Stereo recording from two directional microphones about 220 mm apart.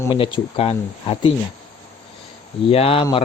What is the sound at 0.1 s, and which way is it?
Speech, 25° left (ahead or behind).